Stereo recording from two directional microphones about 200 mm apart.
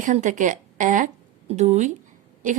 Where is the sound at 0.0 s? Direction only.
40° right (ahead or behind).